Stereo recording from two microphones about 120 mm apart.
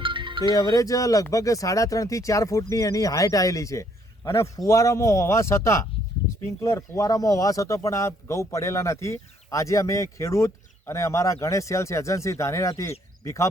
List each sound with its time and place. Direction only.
0.0 s music: 45° right (ahead or behind)
0.5 s speech: 30° left (ahead or behind)